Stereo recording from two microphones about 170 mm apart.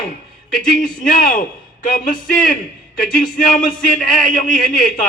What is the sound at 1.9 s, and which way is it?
Speech, 50° left (ahead or behind).